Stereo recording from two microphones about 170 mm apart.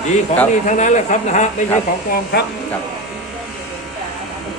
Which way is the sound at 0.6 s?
45° left (ahead or behind).